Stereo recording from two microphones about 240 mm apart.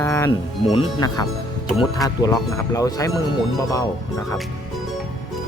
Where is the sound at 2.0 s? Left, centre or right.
Centre.